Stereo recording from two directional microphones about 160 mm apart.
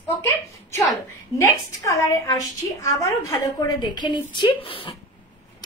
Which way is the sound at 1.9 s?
20° left (ahead or behind).